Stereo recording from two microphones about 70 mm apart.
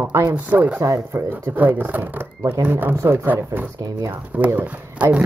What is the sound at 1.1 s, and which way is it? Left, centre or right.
Speech, right.